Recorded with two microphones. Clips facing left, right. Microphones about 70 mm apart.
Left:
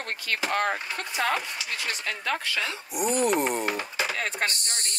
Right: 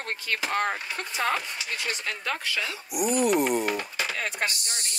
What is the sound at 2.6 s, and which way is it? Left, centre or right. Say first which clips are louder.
Speech: even; left.